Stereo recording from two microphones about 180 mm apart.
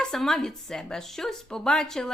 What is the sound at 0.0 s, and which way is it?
Speech, centre (ahead or behind).